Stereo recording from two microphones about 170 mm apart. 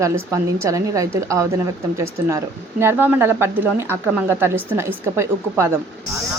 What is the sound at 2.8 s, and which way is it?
A woman's voice, 15° right (ahead or behind).